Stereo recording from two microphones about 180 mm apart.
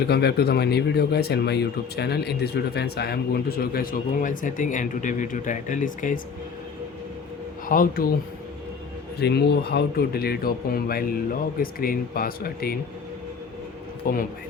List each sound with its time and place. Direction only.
0.1 s speech: 65° left (ahead or behind); by 6.1 s 45° left (ahead or behind)
7.7 s speech: 55° left (ahead or behind)
9.2 s speech: 65° left (ahead or behind)
14.0 s speech: 55° left (ahead or behind)